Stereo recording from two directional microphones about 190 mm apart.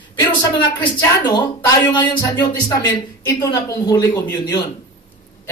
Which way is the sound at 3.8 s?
20° left (ahead or behind).